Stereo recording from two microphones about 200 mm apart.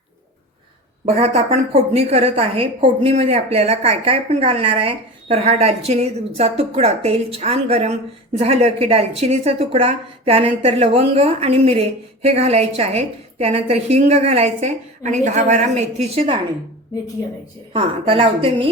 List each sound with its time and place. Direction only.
1.0 s a woman's voice: 30° right (ahead or behind)
17.7 s a woman's voice: 25° right (ahead or behind)